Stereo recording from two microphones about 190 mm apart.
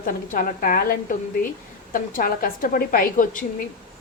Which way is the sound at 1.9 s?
50° left (ahead or behind).